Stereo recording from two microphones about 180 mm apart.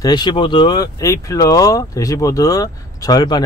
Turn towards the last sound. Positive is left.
turn(degrees=20)  # may be behind; listen again after turning